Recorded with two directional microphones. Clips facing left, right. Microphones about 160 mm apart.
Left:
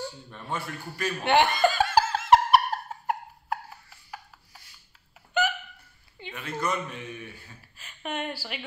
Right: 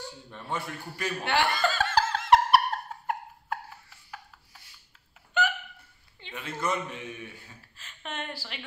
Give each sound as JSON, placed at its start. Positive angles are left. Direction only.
{"t": 0.3, "sound": "a man's voice", "side_deg": -20}
{"t": 1.2, "sound": "laughter", "side_deg": 20}
{"t": 6.3, "sound": "speech", "side_deg": -25}
{"t": 7.7, "sound": "a woman's voice", "side_deg": 10}